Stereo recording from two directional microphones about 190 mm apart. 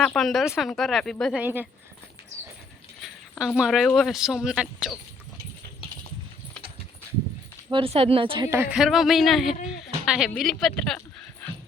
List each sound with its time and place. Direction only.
0.0 s speech: centre (ahead or behind)
3.0 s speech: 5° right (ahead or behind)
7.7 s speech: 30° right (ahead or behind)
8.4 s speech: 10° right (ahead or behind)